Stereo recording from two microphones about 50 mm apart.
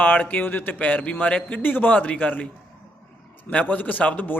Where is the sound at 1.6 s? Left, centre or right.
Left.